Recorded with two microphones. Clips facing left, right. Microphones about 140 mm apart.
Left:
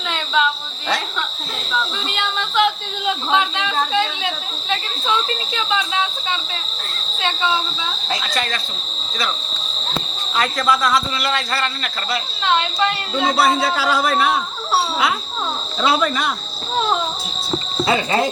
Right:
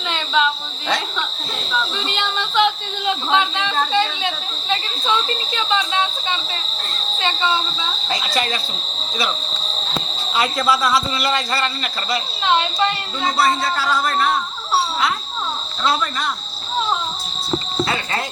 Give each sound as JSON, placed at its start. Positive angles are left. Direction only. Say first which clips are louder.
{"t": 0.1, "sound": "cricket", "louder": "even", "side_deg": 0}
{"t": 1.7, "sound": "a sound", "louder": "even", "side_deg": 0}
{"t": 4.7, "sound": "speech", "louder": "even", "side_deg": 0}
{"t": 7.2, "sound": "a man's voice", "louder": "even", "side_deg": 0}
{"t": 10.3, "sound": "a man's voice", "louder": "even", "side_deg": -5}
{"t": 15.8, "sound": "speech", "louder": "left 3 dB", "side_deg": 5}
{"t": 17.8, "sound": "speech", "louder": "left 6 dB", "side_deg": 20}